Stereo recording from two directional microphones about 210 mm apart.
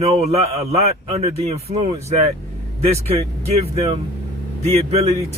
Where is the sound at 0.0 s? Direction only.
30° right (ahead or behind).